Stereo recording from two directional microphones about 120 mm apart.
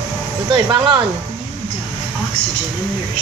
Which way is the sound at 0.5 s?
40° right (ahead or behind).